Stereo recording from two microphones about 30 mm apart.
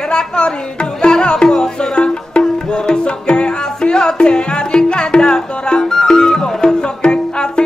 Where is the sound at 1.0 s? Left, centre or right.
Left.